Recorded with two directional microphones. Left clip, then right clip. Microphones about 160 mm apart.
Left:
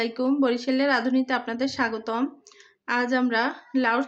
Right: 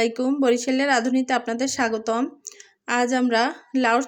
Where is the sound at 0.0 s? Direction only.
35° right (ahead or behind).